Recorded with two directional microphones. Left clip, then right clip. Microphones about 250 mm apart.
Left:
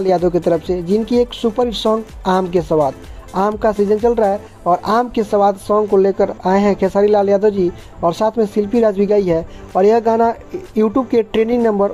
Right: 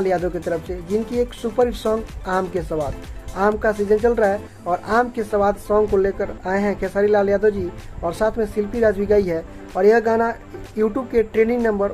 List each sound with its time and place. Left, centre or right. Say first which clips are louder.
0.0 s speech: left 6 dB; left